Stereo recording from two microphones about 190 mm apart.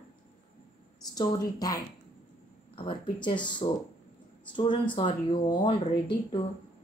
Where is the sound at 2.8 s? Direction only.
25° left (ahead or behind).